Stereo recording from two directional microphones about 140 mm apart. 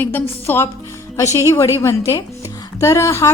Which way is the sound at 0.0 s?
15° left (ahead or behind).